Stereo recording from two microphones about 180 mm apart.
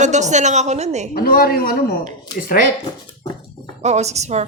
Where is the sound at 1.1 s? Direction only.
55° left (ahead or behind).